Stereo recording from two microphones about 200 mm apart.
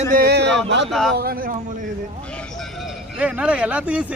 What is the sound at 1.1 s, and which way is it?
Speech, 50° right (ahead or behind).